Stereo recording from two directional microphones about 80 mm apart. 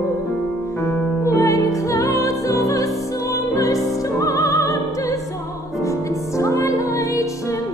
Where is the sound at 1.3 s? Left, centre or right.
Left.